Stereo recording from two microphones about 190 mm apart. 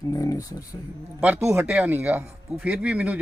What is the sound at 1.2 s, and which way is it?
Speech, 10° right (ahead or behind).